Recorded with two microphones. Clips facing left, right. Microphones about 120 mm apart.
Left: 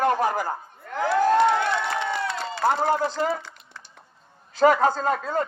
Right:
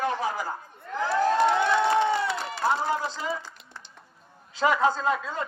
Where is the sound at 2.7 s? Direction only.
60° left (ahead or behind).